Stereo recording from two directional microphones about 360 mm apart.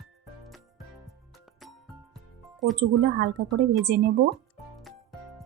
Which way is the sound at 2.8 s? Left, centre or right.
Right.